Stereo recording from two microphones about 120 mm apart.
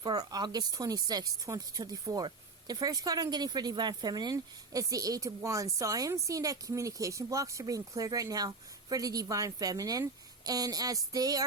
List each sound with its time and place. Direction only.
0.0 s speech: 30° right (ahead or behind)